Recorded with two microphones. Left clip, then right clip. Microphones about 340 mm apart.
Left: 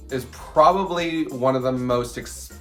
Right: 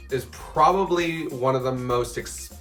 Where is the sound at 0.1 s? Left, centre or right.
Centre.